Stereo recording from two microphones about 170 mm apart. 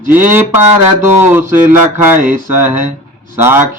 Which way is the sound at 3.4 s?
15° right (ahead or behind).